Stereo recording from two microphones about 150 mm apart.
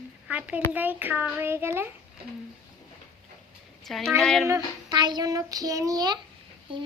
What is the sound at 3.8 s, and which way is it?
Speech, centre (ahead or behind).